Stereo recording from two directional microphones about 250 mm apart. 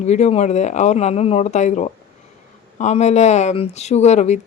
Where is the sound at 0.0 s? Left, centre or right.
Left.